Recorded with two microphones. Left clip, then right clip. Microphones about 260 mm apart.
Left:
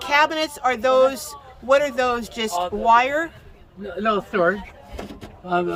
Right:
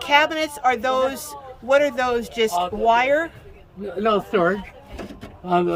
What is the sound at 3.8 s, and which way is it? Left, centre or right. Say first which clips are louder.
Speech: right 2 dB; right.